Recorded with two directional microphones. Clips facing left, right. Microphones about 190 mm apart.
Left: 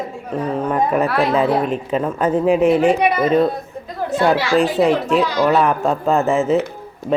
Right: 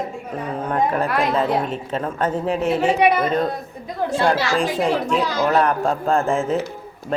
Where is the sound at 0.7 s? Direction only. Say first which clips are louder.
Left 1 dB; 5° left (ahead or behind).